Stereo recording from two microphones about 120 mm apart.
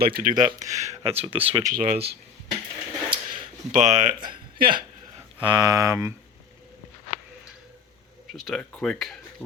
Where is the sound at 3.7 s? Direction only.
90° right.